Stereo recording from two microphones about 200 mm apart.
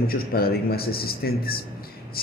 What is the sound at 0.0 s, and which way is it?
A man's voice, 50° left (ahead or behind).